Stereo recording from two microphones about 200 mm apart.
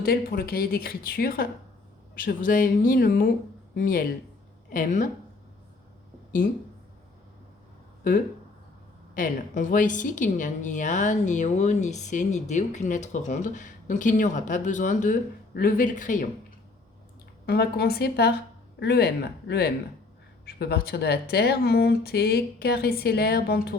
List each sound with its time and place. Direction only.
0.0 s a woman's voice: 50° left (ahead or behind)
6.4 s a woman's voice: 40° left (ahead or behind)
9.1 s a woman's voice: 40° left (ahead or behind)
17.4 s speech: 55° left (ahead or behind)